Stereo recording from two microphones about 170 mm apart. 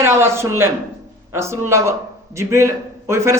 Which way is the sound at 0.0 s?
15° right (ahead or behind).